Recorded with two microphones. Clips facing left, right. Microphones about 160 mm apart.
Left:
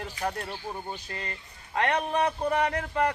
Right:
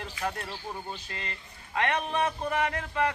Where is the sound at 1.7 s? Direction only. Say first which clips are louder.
Left 2 dB; 40° left (ahead or behind).